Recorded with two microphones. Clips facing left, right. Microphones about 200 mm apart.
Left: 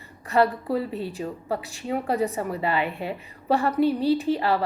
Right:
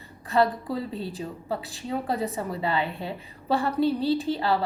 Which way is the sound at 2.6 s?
30° right (ahead or behind).